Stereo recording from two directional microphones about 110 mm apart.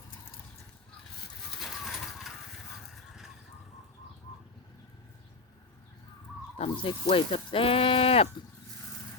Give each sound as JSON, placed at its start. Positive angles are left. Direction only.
{"t": 1.5, "sound": "bird", "side_deg": 0}
{"t": 6.6, "sound": "speech", "side_deg": 55}